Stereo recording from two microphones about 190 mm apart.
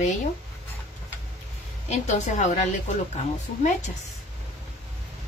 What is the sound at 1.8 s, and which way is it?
Speech, 40° left (ahead or behind).